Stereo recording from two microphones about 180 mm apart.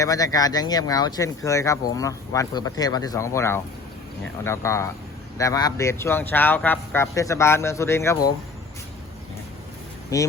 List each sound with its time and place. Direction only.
0.0 s speech: 20° left (ahead or behind)
10.1 s speech: 20° left (ahead or behind)